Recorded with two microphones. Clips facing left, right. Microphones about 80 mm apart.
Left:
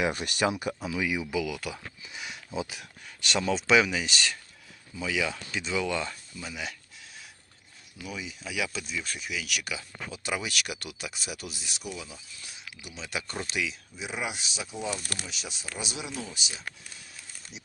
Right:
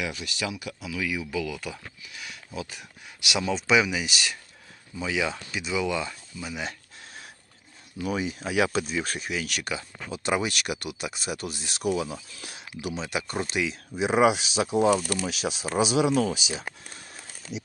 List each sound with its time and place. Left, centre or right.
0.0 s speech: left
0.9 s speech: left; by 1.8 s centre
2.1 s a sound: left
3.2 s speech: centre
4.9 s speech: right
5.5 s speech: centre
8.0 s speech: right
11.6 s speech: right
12.4 s speech: right
13.1 s speech: centre
13.5 s speech: right
13.9 s speech: right
16.8 s crumpling: right